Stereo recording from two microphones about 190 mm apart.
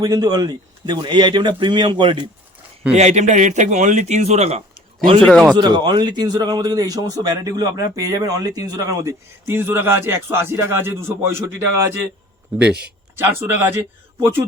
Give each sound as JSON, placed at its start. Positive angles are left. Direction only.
{"t": 0.0, "sound": "a man's voice", "side_deg": -20}
{"t": 2.9, "sound": "a man's voice", "side_deg": -35}
{"t": 5.2, "sound": "speech", "side_deg": 0}
{"t": 5.5, "sound": "a man's voice", "side_deg": -25}
{"t": 12.6, "sound": "speech", "side_deg": -60}
{"t": 13.1, "sound": "a man's voice", "side_deg": -15}